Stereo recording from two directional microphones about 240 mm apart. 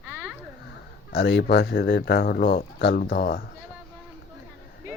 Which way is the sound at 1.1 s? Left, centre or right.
Left.